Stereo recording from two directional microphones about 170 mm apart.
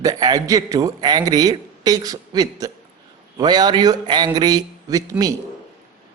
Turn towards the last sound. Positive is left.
turn(degrees=-20)  # may be behind; listen again after turning